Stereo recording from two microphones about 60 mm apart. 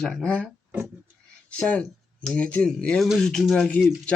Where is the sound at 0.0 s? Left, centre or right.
Centre.